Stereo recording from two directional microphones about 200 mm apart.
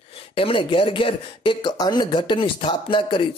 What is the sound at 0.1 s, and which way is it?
Speech, 30° left (ahead or behind).